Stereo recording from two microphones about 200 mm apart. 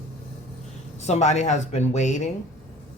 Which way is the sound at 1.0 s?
35° left (ahead or behind).